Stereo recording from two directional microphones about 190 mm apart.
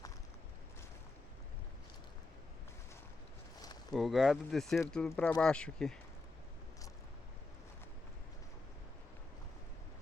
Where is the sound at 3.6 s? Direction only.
20° left (ahead or behind).